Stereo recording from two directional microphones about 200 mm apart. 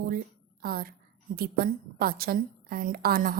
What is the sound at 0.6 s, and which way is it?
A woman's voice, 50° right (ahead or behind).